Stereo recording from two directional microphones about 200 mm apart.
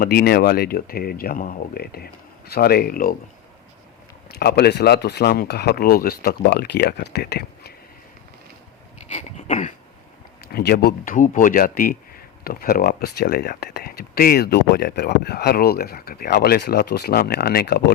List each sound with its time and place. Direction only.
0.0 s speech: 50° left (ahead or behind)
4.3 s speech: 55° left (ahead or behind)
9.0 s a sound: 35° left (ahead or behind)
10.5 s speech: 50° left (ahead or behind)